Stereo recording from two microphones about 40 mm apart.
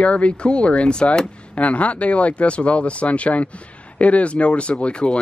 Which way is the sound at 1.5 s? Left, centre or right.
Left.